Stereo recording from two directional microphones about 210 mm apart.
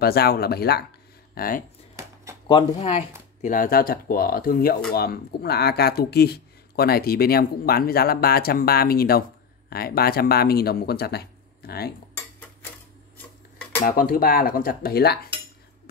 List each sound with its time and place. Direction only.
0.0 s speech: 50° left (ahead or behind)
2.4 s speech: 20° left (ahead or behind)
3.4 s speech: 40° left (ahead or behind)
13.6 s cutlery: 10° left (ahead or behind)
13.8 s speech: 40° left (ahead or behind)